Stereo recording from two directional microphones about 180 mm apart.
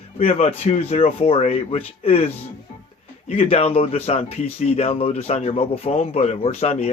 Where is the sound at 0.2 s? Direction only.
35° left (ahead or behind).